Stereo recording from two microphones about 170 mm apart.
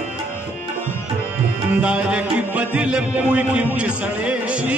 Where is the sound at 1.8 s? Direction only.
5° right (ahead or behind).